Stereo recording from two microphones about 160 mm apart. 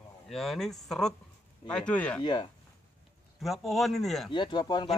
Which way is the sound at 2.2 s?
30° left (ahead or behind).